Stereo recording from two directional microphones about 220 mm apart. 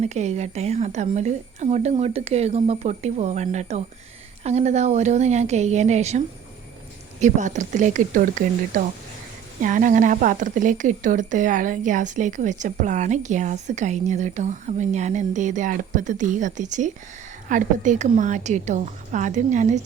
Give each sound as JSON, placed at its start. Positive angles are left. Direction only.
{"t": 0.0, "sound": "a woman's voice", "side_deg": -30}